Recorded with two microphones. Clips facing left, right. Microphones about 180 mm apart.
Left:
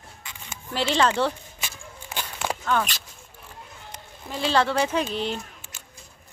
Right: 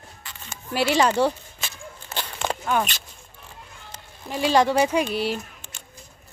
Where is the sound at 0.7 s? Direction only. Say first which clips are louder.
Right 2 dB; 10° right (ahead or behind).